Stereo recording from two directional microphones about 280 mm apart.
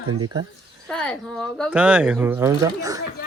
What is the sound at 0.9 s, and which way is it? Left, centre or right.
Speech, centre.